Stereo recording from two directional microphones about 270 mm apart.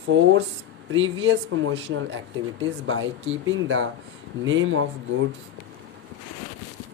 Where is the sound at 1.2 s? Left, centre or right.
Right.